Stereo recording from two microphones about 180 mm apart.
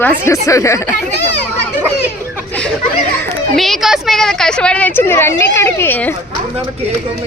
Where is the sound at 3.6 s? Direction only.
Centre (ahead or behind).